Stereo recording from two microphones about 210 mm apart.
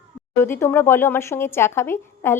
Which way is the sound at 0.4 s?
10° left (ahead or behind).